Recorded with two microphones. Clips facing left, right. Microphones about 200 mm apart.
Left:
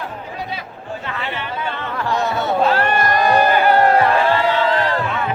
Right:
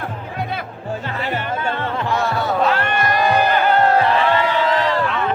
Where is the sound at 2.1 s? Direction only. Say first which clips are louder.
Left 2 dB; 20° left (ahead or behind); by 3.4 s 45° left (ahead or behind).